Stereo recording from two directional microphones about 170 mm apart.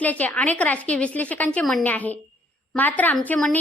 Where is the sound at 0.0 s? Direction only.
10° left (ahead or behind).